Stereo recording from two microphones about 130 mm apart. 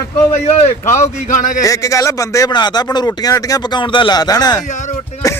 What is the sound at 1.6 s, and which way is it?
Speech, 25° left (ahead or behind).